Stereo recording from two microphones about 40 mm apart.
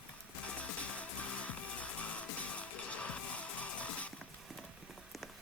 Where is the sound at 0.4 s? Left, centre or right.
Left.